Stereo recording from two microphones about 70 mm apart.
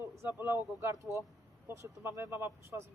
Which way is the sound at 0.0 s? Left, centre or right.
Right.